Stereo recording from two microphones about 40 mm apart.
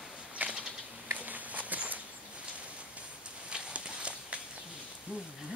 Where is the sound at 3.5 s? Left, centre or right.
Right.